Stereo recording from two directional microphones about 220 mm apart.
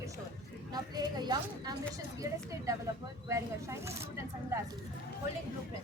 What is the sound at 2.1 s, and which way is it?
Speech, 15° right (ahead or behind).